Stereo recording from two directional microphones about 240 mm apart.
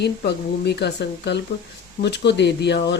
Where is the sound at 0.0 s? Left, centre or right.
Left.